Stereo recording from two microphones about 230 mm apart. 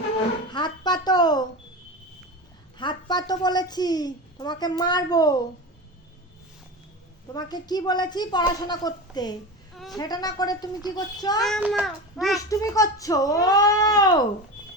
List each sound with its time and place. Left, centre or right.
0.5 s a sound: centre
2.7 s a child's voice: centre
7.3 s a woman's voice: centre
9.7 s a sound: centre
10.0 s a woman's voice: centre
11.4 s child singing: centre
12.5 s a woman's voice: centre